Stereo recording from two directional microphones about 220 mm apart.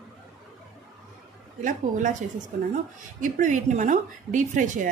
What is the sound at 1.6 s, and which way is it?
Speech, 35° right (ahead or behind).